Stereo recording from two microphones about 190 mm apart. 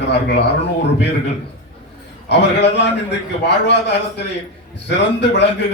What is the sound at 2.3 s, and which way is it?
A man's voice, 65° left (ahead or behind).